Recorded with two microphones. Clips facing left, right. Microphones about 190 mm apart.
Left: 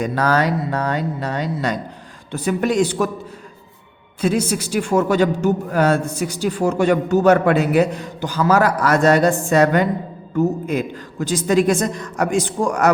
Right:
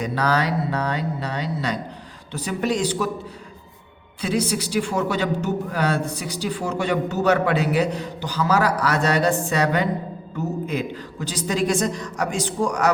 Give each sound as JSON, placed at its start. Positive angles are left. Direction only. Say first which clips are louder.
{"t": 0.0, "sound": "a man's voice", "louder": "left 4 dB", "side_deg": 50}
{"t": 4.2, "sound": "a man's voice", "louder": "left 4 dB", "side_deg": 45}